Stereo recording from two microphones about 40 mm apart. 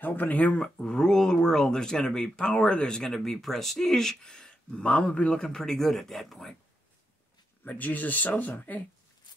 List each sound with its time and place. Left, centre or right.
0.0 s speech: left
0.6 s speech: left
5.4 s speech: centre
7.6 s speech: left